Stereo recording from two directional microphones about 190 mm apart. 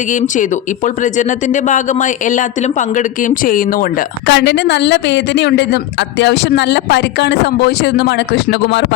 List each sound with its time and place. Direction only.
0.1 s a woman's voice: 40° left (ahead or behind); by 8.9 s 70° left (ahead or behind)